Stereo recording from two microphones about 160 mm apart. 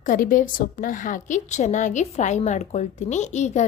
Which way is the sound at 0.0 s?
60° left (ahead or behind).